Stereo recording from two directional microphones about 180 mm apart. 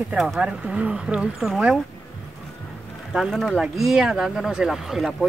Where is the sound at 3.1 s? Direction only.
Centre (ahead or behind).